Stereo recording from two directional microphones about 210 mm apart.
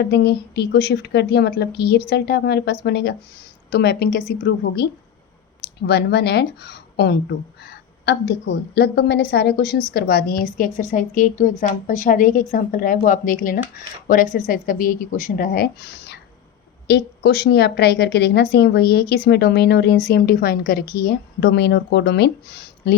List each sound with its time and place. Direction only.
0.0 s speech: 55° left (ahead or behind)